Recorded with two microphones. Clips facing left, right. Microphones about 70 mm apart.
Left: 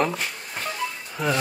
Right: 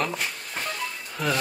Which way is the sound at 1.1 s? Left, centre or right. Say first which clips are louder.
Left 2 dB; centre.